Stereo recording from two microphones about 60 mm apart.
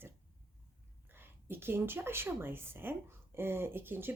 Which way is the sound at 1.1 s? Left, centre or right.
Right.